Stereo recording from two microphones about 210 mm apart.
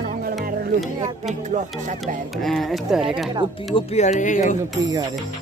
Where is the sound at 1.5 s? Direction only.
35° right (ahead or behind).